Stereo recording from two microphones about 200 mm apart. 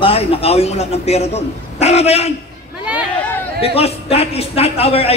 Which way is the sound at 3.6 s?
30° left (ahead or behind).